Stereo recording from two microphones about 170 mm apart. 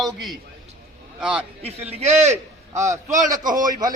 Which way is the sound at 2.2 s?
15° right (ahead or behind).